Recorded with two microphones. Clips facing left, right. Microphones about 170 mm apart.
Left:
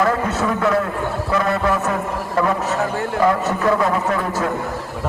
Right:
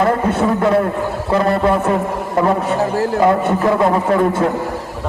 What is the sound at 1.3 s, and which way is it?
A man's voice, 30° right (ahead or behind).